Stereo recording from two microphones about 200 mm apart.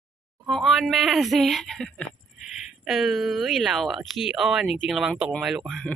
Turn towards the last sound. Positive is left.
turn(degrees=0)  # may be behind; listen again after turning